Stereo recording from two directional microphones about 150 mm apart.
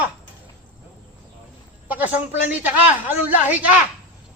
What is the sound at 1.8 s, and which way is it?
A man's voice, 10° right (ahead or behind).